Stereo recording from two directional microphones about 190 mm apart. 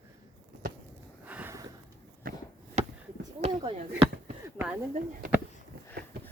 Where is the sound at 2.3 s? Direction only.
50° right (ahead or behind).